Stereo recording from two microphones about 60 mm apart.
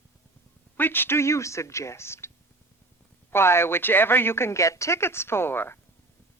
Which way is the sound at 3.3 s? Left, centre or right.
Left.